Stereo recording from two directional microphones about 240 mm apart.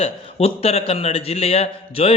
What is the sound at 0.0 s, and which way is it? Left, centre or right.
A man's voice, left.